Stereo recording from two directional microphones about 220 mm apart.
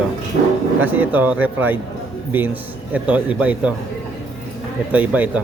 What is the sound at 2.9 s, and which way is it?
Speech, 5° right (ahead or behind).